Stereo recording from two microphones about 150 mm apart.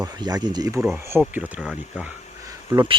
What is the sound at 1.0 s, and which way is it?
Speech, 15° right (ahead or behind).